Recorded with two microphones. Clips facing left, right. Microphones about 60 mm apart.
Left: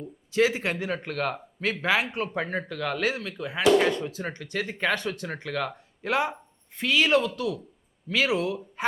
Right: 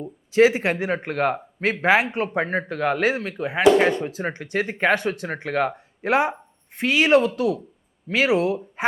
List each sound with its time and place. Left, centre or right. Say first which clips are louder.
0.0 s speech: right 7 dB; right